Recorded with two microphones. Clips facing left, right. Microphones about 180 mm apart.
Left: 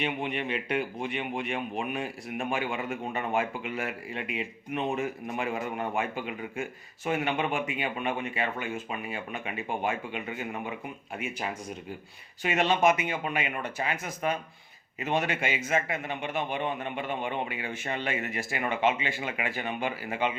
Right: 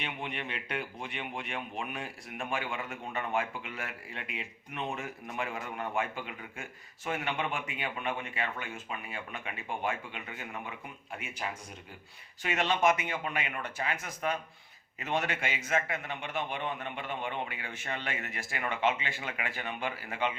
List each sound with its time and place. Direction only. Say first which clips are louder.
0.0 s a man's voice: left 7 dB; 10° left (ahead or behind)
12.4 s a man's voice: left 4 dB; 15° left (ahead or behind)
15.7 s a man's voice: even; 20° left (ahead or behind)